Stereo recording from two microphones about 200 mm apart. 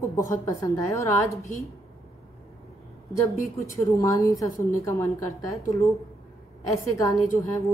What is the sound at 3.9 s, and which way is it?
A woman's voice, 15° left (ahead or behind).